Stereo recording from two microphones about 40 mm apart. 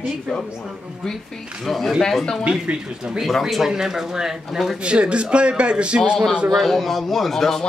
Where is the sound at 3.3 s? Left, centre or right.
Centre.